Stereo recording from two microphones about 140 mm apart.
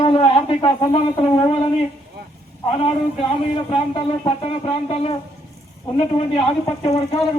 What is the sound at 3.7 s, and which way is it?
Speech, 40° left (ahead or behind).